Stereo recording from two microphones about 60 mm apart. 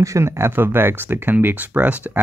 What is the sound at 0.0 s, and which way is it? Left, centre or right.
Speech, right.